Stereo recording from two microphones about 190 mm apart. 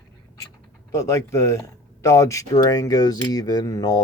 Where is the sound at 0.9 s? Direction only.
15° left (ahead or behind).